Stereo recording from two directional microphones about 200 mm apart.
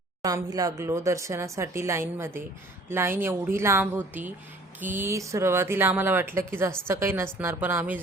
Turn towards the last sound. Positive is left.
turn(degrees=-10)  # may be behind; listen again after turning